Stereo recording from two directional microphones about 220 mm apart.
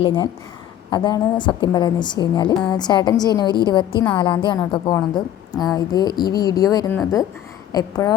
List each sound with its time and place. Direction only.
0.0 s a woman's voice: 20° left (ahead or behind)